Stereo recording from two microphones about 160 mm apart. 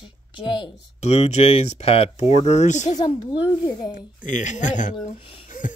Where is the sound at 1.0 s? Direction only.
45° left (ahead or behind).